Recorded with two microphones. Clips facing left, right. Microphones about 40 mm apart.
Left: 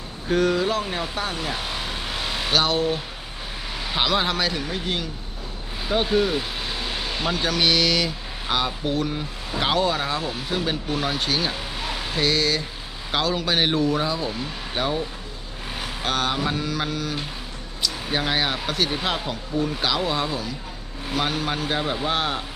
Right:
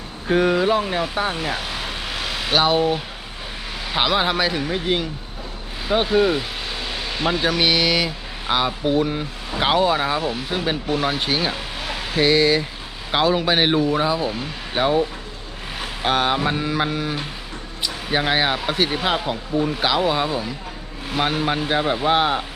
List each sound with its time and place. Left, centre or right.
0.3 s speech: right
2.5 s speech: centre
3.9 s speech: centre
16.0 s speech: centre